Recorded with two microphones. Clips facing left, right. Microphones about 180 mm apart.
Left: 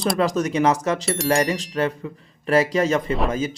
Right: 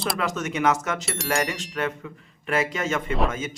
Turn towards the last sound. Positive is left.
turn(degrees=35)  # may be behind; listen again after turning